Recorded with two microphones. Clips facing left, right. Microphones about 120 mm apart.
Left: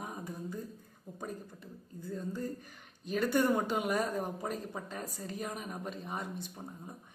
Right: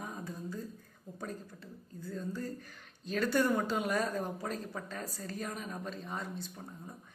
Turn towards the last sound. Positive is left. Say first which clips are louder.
# left 1 dB
turn(degrees=15)  # may be behind; listen again after turning